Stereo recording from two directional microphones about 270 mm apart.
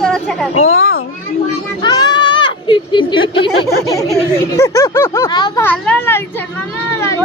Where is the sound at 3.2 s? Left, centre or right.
Left.